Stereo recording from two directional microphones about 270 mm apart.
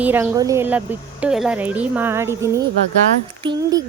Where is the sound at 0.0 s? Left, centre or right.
Centre.